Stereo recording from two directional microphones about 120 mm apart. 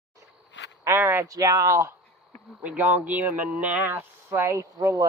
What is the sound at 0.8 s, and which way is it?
Speech, 20° right (ahead or behind).